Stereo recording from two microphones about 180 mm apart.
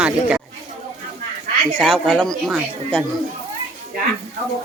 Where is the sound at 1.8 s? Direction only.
Centre (ahead or behind).